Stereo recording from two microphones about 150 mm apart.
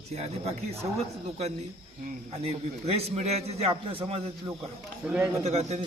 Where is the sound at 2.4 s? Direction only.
45° right (ahead or behind).